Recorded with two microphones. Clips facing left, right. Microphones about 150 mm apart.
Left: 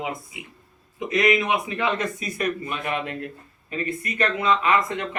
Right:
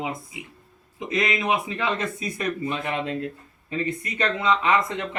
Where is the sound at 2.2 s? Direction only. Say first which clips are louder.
Left 1 dB; 25° right (ahead or behind).